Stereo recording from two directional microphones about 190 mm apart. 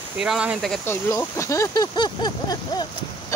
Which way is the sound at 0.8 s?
15° left (ahead or behind).